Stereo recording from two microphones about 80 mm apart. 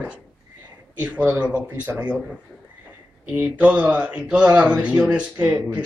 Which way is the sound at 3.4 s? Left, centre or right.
Centre.